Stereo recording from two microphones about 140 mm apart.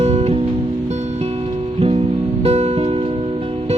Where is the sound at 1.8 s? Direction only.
45° right (ahead or behind).